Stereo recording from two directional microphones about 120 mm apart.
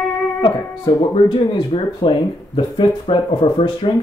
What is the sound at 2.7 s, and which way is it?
Speech, 45° left (ahead or behind).